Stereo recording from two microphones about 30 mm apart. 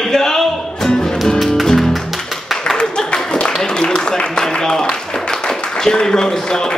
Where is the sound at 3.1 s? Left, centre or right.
Left.